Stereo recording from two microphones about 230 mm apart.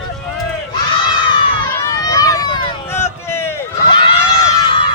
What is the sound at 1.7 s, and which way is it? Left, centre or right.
Run, centre.